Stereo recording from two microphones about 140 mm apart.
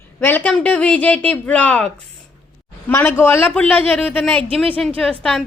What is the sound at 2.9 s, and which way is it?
A woman's voice, 15° left (ahead or behind).